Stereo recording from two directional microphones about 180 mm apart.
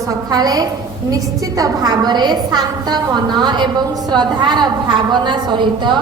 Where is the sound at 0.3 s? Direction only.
20° right (ahead or behind).